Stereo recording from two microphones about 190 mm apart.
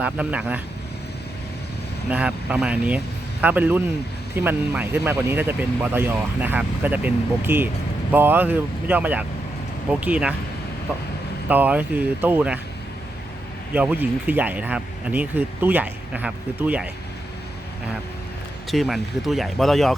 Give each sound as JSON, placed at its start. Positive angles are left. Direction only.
{"t": 0.0, "sound": "speech", "side_deg": -5}
{"t": 2.0, "sound": "speech", "side_deg": -5}
{"t": 11.4, "sound": "speech", "side_deg": -10}
{"t": 13.7, "sound": "speech", "side_deg": -10}
{"t": 18.7, "sound": "speech", "side_deg": 0}